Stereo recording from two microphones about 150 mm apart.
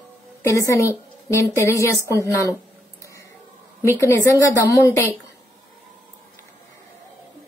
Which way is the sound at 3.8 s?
20° left (ahead or behind).